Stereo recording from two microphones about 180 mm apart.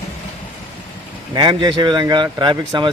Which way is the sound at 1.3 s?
25° right (ahead or behind).